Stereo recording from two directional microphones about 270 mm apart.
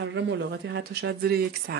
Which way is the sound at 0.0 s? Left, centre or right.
Right.